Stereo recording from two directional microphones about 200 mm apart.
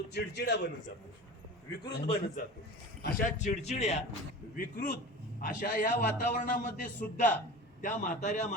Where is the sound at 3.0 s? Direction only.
45° left (ahead or behind).